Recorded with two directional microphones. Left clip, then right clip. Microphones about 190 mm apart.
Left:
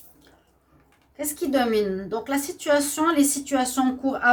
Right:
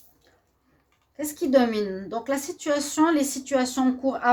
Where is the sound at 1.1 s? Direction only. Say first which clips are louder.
Right 3 dB; 40° right (ahead or behind).